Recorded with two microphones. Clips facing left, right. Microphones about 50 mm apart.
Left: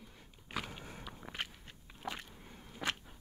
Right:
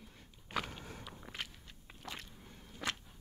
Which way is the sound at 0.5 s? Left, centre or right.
Centre.